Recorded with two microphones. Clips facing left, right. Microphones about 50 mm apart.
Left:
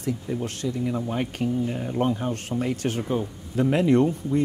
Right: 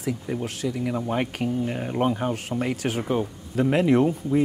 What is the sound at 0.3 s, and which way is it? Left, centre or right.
Speech, centre.